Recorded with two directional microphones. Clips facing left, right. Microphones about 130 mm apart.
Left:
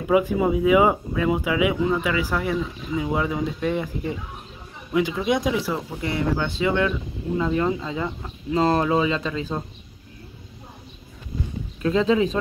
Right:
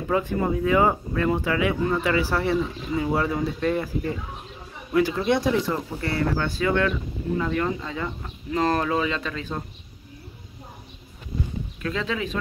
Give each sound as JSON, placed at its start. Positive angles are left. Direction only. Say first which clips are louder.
{"t": 0.1, "sound": "speech", "louder": "left 4 dB", "side_deg": 10}
{"t": 9.2, "sound": "speech", "louder": "left 4 dB", "side_deg": 30}
{"t": 11.8, "sound": "speech", "louder": "left 9 dB", "side_deg": 30}